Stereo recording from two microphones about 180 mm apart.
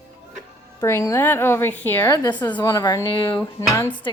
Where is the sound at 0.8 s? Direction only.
15° left (ahead or behind).